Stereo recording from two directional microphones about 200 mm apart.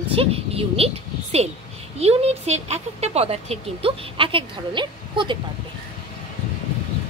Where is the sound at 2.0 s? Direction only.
30° right (ahead or behind).